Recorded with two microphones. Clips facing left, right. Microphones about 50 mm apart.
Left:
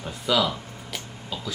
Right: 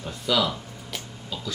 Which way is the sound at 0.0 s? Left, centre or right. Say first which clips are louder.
Left 1 dB; centre.